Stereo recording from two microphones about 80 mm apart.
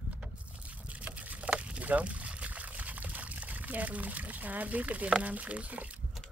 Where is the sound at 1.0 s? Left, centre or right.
Centre.